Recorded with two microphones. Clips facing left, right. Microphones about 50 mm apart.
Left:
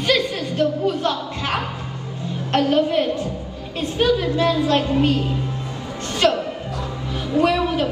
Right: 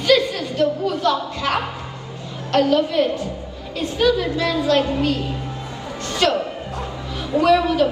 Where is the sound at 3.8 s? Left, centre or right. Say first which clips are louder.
Right 1 dB; left.